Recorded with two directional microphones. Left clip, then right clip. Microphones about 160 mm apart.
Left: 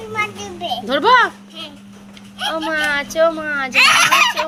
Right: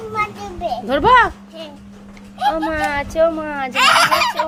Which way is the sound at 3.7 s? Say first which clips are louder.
Left 1 dB; 25° right (ahead or behind).